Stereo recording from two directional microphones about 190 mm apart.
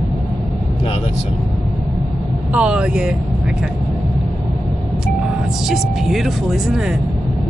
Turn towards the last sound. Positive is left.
turn(degrees=0)  # may be behind; listen again after turning